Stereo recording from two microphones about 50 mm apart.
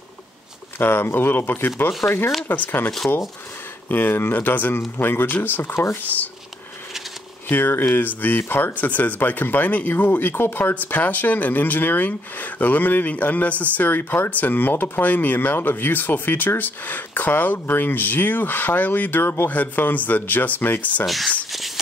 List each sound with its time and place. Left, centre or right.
0.7 s speech: left
2.5 s speech: left
3.9 s speech: left
4.7 s speech: left
6.1 s speech: left
7.4 s speech: left
10.3 s speech: left
10.6 s speech: left
21.0 s speech: centre
21.5 s whispering: centre